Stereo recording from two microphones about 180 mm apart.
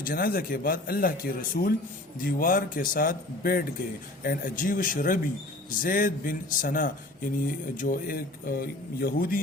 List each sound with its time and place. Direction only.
0.0 s speech: 50° left (ahead or behind)